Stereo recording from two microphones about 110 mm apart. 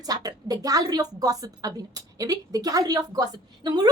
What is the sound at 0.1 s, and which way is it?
A woman's voice, 35° right (ahead or behind).